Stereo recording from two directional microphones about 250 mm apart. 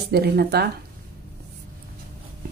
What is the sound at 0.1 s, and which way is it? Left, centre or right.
Speech, right.